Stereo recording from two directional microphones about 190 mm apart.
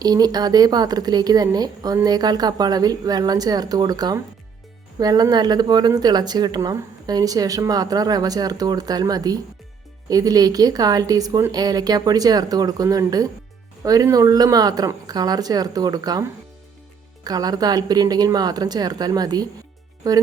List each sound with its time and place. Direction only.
0.0 s speech: 20° right (ahead or behind)
17.2 s speech: 20° right (ahead or behind)